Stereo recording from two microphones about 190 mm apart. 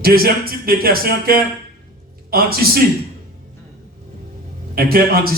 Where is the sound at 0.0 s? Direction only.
50° right (ahead or behind).